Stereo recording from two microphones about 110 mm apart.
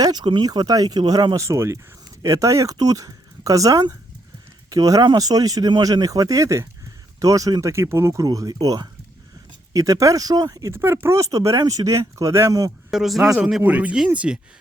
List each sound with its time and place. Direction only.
0.0 s speech: 40° right (ahead or behind)
1.4 s speech: 25° right (ahead or behind)
12.9 s speech: centre (ahead or behind)